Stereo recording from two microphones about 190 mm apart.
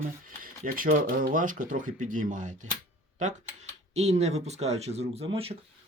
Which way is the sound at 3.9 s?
35° right (ahead or behind).